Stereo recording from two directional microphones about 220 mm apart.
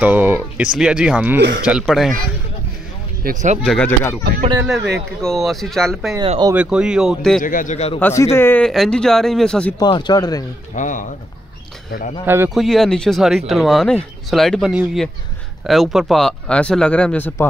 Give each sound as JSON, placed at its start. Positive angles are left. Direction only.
{"t": 0.0, "sound": "speech", "side_deg": -10}
{"t": 3.3, "sound": "speech", "side_deg": -35}
{"t": 3.6, "sound": "speech", "side_deg": 5}
{"t": 5.2, "sound": "speech", "side_deg": 0}
{"t": 6.1, "sound": "speech", "side_deg": -20}
{"t": 6.5, "sound": "speech", "side_deg": -5}
{"t": 7.4, "sound": "a man's voice", "side_deg": 35}
{"t": 8.0, "sound": "speech", "side_deg": 10}
{"t": 9.8, "sound": "speech", "side_deg": 20}
{"t": 10.8, "sound": "a man's voice", "side_deg": 35}
{"t": 12.3, "sound": "speech", "side_deg": -10}
{"t": 12.5, "sound": "speech", "side_deg": 0}